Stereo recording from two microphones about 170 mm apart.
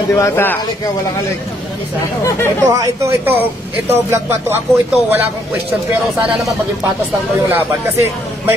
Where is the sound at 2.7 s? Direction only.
20° right (ahead or behind).